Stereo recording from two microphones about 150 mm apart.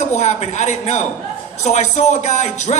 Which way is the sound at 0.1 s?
50° left (ahead or behind).